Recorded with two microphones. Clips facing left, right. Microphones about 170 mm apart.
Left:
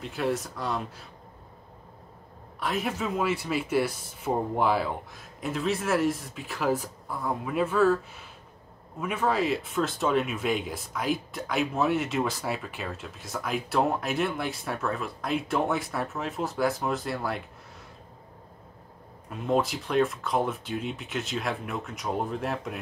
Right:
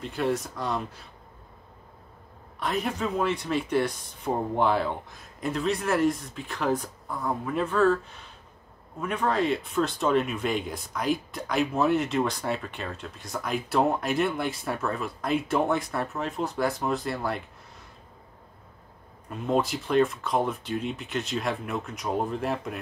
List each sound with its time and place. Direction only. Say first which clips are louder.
0.0 s speech: right 1 dB; centre (ahead or behind)
2.6 s speech: right 1 dB; 5° left (ahead or behind)
19.2 s speech: even; centre (ahead or behind)